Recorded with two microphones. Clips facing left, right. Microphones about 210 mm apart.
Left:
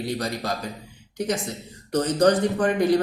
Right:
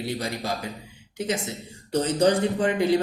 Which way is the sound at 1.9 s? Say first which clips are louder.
Left 1 dB; 30° right (ahead or behind).